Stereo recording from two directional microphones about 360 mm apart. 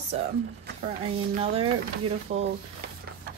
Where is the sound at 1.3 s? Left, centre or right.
Centre.